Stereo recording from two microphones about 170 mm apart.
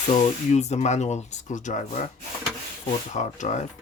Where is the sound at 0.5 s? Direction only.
40° left (ahead or behind).